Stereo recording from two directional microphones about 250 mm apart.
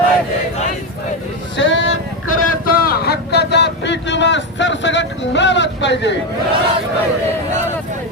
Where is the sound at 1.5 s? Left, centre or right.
Left.